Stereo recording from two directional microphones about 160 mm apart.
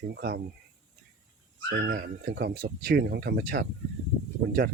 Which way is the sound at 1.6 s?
65° right (ahead or behind).